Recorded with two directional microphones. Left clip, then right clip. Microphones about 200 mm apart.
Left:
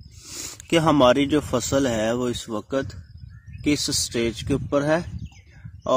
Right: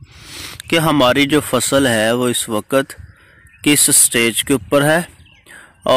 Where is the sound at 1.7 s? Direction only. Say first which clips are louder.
Right 8 dB; 25° right (ahead or behind).